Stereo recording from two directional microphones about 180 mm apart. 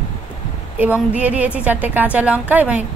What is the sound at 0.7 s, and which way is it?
A woman's voice, 10° right (ahead or behind).